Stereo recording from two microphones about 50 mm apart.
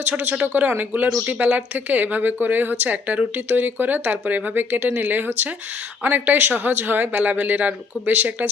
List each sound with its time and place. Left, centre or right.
0.4 s speech: right